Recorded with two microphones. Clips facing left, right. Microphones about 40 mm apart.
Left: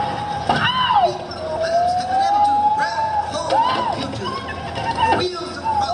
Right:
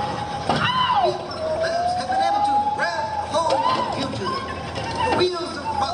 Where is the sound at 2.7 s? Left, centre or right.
Centre.